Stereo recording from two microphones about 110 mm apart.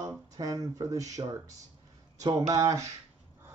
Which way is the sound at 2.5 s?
30° right (ahead or behind).